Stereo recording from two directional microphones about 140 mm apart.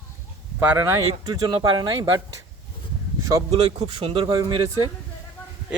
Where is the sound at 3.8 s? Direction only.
45° right (ahead or behind).